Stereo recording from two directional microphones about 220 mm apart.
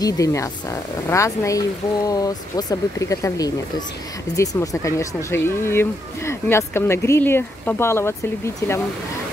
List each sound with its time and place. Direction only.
0.0 s speech: 15° left (ahead or behind)